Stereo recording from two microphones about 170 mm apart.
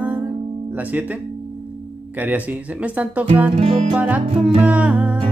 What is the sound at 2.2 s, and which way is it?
Music, 10° right (ahead or behind).